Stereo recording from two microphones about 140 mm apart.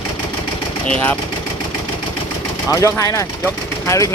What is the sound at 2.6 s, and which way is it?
Speech, 25° left (ahead or behind).